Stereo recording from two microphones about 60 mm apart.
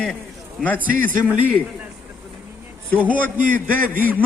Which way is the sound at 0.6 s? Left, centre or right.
Left.